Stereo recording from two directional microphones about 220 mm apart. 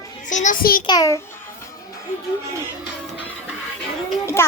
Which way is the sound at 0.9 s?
15° left (ahead or behind).